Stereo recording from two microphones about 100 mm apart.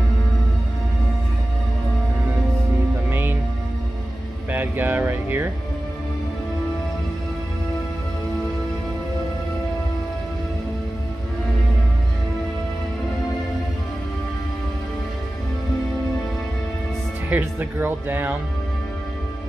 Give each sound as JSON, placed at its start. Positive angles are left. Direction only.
{"t": 3.1, "sound": "music", "side_deg": -20}
{"t": 4.5, "sound": "a sound", "side_deg": -20}
{"t": 17.3, "sound": "speech", "side_deg": -20}